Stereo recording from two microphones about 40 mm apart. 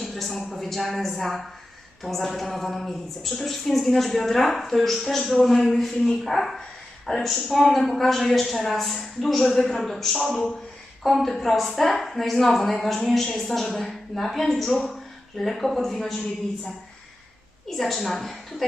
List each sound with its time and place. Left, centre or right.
0.0 s a woman's voice: centre
17.7 s a woman's voice: centre